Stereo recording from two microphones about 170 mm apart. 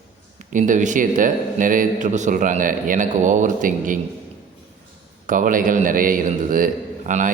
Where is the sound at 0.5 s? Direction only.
50° right (ahead or behind).